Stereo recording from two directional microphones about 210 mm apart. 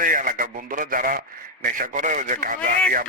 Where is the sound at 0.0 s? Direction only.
40° right (ahead or behind).